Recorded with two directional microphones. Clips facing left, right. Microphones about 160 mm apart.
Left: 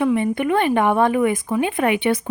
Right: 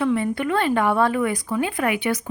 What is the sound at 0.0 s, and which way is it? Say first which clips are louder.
Speech: left 3 dB; 20° left (ahead or behind).